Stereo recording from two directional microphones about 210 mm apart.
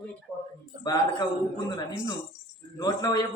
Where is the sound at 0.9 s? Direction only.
15° left (ahead or behind).